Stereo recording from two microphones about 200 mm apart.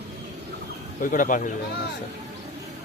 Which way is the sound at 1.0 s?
40° left (ahead or behind).